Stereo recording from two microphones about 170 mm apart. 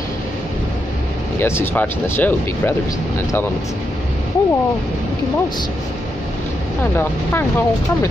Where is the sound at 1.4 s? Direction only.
15° left (ahead or behind).